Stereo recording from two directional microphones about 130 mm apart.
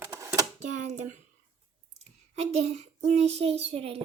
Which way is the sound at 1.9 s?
55° right (ahead or behind).